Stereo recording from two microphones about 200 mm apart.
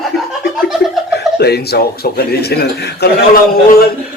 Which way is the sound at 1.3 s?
55° left (ahead or behind).